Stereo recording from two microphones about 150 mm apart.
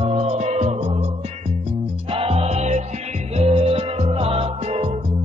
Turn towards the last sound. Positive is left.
turn(degrees=-45)  # may be behind; listen again after turning